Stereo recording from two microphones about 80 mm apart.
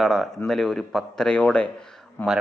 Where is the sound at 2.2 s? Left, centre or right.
Left.